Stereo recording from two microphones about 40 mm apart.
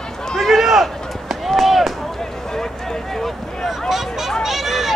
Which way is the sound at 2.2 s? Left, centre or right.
Centre.